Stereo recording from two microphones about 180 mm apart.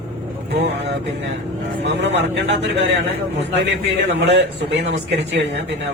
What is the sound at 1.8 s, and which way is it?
Speech, 75° right (ahead or behind).